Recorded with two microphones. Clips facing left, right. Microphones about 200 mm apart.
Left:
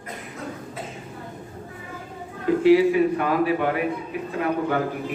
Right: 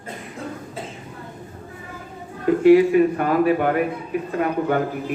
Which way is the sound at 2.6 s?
50° right (ahead or behind).